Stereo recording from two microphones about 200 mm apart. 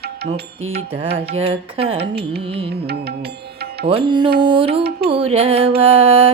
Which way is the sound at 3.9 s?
25° right (ahead or behind).